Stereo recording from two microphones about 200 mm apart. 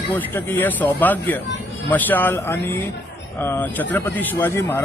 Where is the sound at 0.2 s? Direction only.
10° left (ahead or behind).